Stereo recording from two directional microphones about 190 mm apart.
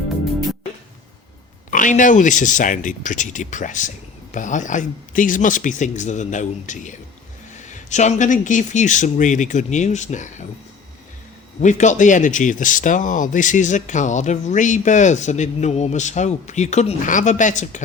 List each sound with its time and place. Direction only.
1.7 s speech: 45° left (ahead or behind)
11.6 s speech: 40° left (ahead or behind)